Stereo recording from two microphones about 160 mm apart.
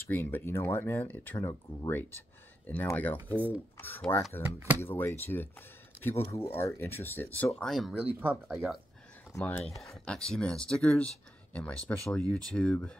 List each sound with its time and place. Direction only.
0.1 s speech: 10° left (ahead or behind)
3.3 s speech: 10° right (ahead or behind)
3.7 s speech: 10° left (ahead or behind)
4.4 s speech: 15° right (ahead or behind)
4.8 s speech: 15° left (ahead or behind); by 8.5 s 10° right (ahead or behind)
9.3 s speech: 10° left (ahead or behind)
10.0 s speech: 5° left (ahead or behind)